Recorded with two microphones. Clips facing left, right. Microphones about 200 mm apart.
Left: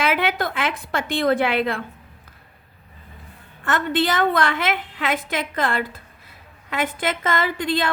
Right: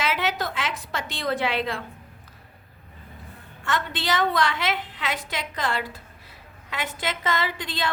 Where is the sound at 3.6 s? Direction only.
55° left (ahead or behind).